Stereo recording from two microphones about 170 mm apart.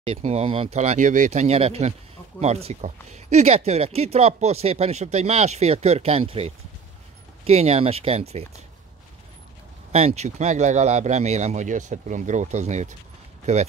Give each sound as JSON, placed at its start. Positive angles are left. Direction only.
{"t": 0.0, "sound": "speech", "side_deg": -35}
{"t": 9.9, "sound": "speech", "side_deg": -40}